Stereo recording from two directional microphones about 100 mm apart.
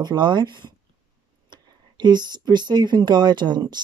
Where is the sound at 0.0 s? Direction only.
50° right (ahead or behind).